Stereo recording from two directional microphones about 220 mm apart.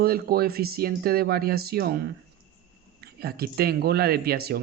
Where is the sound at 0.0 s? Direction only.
45° right (ahead or behind).